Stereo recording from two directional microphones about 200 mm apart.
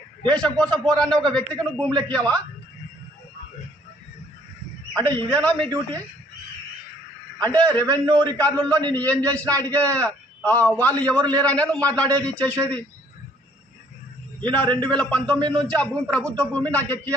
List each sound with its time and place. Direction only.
0.3 s a man's voice: 5° left (ahead or behind)
4.9 s a man's voice: 10° left (ahead or behind)
7.3 s a man's voice: 5° left (ahead or behind)
8.0 s a man's voice: 20° right (ahead or behind)
8.7 s a man's voice: 10° left (ahead or behind)
14.4 s a man's voice: 5° left (ahead or behind)
15.4 s a man's voice: 20° right (ahead or behind)
15.6 s a man's voice: 5° left (ahead or behind)